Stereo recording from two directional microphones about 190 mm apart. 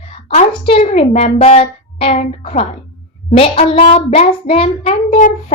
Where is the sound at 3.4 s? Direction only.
30° left (ahead or behind).